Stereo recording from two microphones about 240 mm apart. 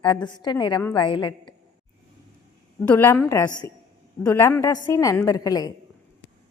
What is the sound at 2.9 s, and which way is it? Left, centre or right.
A woman's voice, centre.